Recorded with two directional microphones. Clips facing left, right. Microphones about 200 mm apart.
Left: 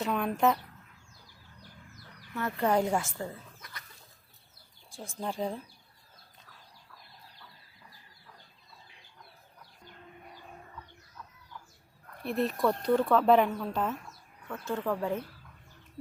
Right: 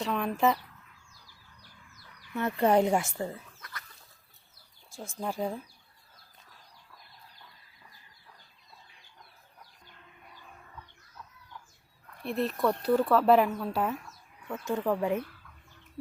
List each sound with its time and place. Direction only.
0.0 s speech: centre (ahead or behind)
2.3 s speech: 20° right (ahead or behind)
3.6 s a sound: 20° left (ahead or behind)
5.1 s speech: centre (ahead or behind)
12.2 s speech: centre (ahead or behind)